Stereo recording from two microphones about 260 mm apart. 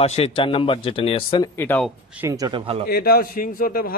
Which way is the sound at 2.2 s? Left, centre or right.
Centre.